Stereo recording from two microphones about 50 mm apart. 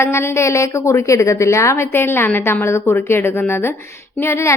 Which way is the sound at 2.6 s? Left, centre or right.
Left.